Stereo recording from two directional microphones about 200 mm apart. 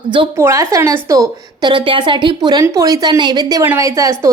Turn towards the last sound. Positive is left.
turn(degrees=-15)  # may be behind; listen again after turning